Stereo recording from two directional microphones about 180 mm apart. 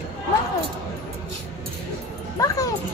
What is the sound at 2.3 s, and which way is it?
Speech, 20° left (ahead or behind).